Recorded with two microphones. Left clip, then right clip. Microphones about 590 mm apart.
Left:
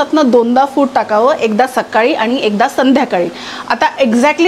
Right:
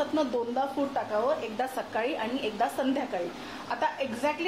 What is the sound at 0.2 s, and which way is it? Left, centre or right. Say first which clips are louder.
A woman's voice: left 19 dB; left.